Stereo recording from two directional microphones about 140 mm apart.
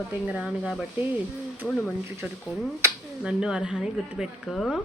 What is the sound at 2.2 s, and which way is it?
A woman's voice, 5° right (ahead or behind).